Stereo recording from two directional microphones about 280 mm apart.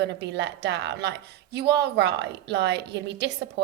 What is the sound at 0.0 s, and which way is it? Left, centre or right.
Speech, right.